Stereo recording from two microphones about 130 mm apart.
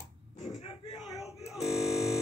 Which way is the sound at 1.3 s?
55° left (ahead or behind).